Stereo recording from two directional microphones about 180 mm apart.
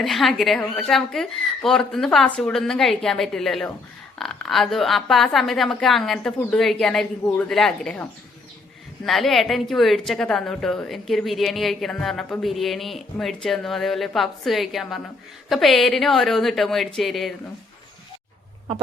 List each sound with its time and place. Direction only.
0.0 s a woman's voice: centre (ahead or behind)
9.0 s a woman's voice: centre (ahead or behind)